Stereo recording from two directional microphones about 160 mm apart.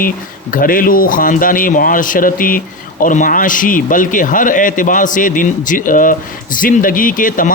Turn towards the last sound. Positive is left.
turn(degrees=55)  # may be behind; listen again after turning